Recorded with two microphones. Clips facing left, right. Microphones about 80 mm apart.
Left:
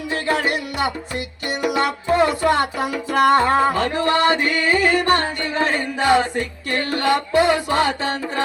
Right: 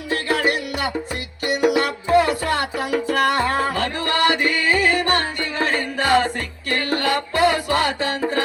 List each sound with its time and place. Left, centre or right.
0.1 s music: left